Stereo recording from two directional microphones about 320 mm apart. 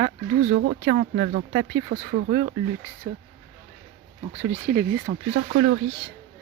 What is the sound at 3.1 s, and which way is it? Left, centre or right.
Speech, centre.